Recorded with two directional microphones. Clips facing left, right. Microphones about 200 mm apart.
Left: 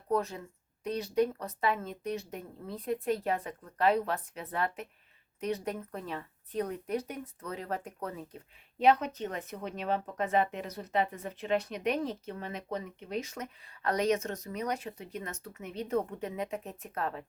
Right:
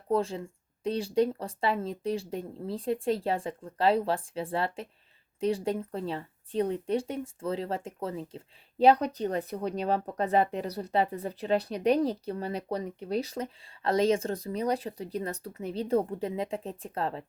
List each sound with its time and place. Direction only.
0.1 s speech: 30° right (ahead or behind)